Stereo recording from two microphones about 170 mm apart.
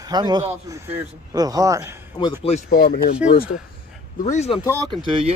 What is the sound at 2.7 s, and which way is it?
Speech, 60° left (ahead or behind).